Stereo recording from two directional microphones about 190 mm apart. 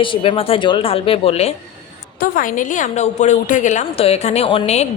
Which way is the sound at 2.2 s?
45° left (ahead or behind).